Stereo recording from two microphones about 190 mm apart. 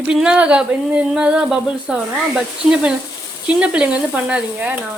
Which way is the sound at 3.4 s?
5° right (ahead or behind).